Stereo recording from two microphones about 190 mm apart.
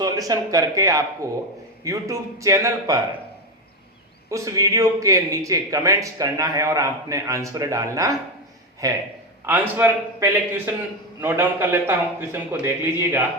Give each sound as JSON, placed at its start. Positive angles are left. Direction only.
{"t": 0.0, "sound": "a man's voice", "side_deg": -20}
{"t": 4.3, "sound": "a man's voice", "side_deg": -15}